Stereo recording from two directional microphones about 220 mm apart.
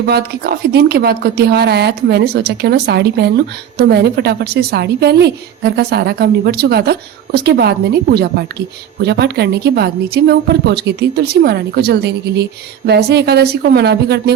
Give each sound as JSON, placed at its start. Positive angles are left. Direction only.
{"t": 0.0, "sound": "a woman's voice", "side_deg": -45}